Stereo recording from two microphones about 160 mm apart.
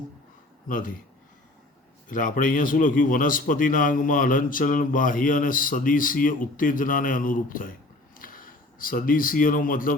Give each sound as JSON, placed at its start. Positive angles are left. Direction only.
{"t": 0.7, "sound": "a man's voice", "side_deg": 55}
{"t": 2.0, "sound": "a man's voice", "side_deg": 55}